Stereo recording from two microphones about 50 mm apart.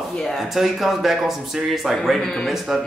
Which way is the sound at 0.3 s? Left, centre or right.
Centre.